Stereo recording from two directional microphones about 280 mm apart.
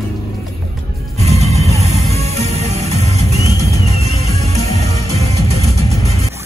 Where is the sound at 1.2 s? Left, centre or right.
Right.